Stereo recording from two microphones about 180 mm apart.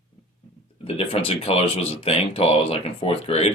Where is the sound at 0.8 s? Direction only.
30° left (ahead or behind).